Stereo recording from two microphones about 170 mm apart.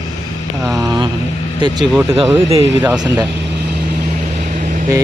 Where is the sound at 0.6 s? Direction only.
Centre (ahead or behind).